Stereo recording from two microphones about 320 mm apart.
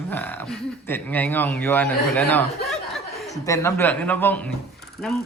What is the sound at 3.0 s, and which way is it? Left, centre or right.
Chuckle, centre.